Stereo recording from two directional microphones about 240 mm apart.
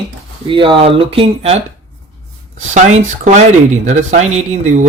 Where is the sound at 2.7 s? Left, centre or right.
Right.